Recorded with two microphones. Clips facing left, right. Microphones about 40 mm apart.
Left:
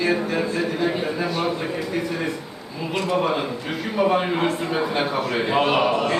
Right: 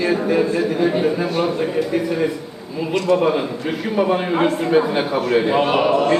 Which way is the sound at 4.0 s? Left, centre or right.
Centre.